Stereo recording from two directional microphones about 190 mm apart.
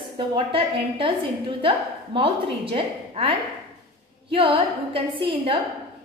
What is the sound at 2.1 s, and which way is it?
A woman's voice, 30° right (ahead or behind).